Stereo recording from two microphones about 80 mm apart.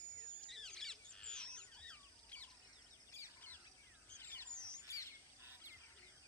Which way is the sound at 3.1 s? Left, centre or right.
Left.